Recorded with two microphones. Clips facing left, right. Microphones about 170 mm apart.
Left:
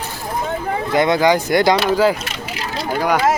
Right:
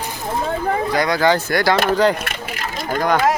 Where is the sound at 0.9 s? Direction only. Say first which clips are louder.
Left 4 dB; 25° left (ahead or behind).